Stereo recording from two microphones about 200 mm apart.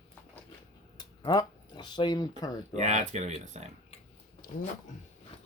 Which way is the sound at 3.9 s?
45° left (ahead or behind).